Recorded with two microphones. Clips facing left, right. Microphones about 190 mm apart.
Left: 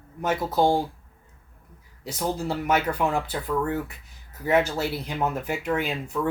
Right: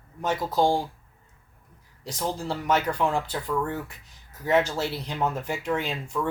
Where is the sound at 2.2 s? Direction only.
10° left (ahead or behind).